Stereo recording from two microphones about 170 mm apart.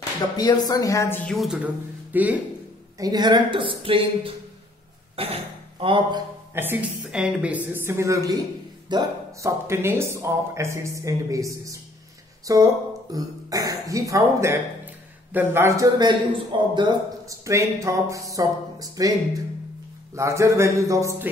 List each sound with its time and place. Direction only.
0.4 s speech: 25° left (ahead or behind)
1.3 s speech: centre (ahead or behind)
3.0 s a man's voice: 25° right (ahead or behind)
6.5 s a man's voice: 10° right (ahead or behind)
20.2 s speech: 15° right (ahead or behind)